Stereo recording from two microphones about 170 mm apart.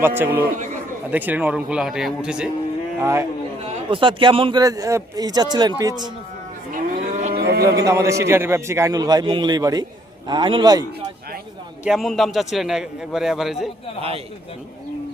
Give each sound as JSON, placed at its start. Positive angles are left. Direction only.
{"t": 0.0, "sound": "a man's voice", "side_deg": -15}
{"t": 3.0, "sound": "a man's voice", "side_deg": -15}
{"t": 3.8, "sound": "a man's voice", "side_deg": -30}
{"t": 6.7, "sound": "moo", "side_deg": -50}
{"t": 7.3, "sound": "livestock", "side_deg": -70}
{"t": 7.6, "sound": "a man's voice", "side_deg": -20}
{"t": 11.9, "sound": "a man's voice", "side_deg": 0}